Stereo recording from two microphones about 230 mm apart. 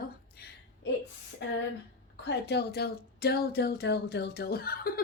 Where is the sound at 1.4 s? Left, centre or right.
Left.